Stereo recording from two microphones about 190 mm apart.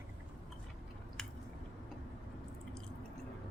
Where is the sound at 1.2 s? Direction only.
Centre (ahead or behind).